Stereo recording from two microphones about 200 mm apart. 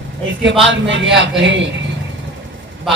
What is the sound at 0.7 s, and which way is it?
A man's voice, 65° right (ahead or behind).